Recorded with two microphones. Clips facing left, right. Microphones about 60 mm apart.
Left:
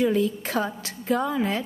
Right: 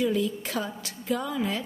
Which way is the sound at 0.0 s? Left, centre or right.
Left.